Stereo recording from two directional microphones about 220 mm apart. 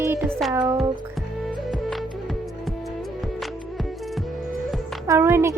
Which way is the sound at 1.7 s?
Centre (ahead or behind).